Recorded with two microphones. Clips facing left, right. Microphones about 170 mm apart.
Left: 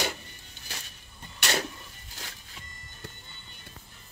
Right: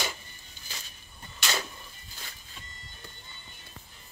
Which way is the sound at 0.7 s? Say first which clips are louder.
Left 2 dB; 70° left (ahead or behind).